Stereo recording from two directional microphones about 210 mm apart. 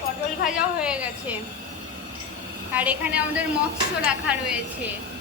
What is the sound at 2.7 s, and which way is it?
A woman's voice, 5° right (ahead or behind).